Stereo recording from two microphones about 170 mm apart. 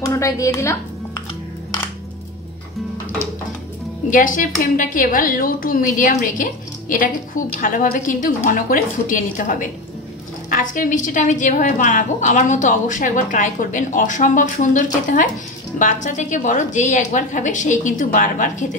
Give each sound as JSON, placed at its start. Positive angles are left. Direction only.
{"t": 0.0, "sound": "speech", "side_deg": 20}
{"t": 4.1, "sound": "a woman's voice", "side_deg": 50}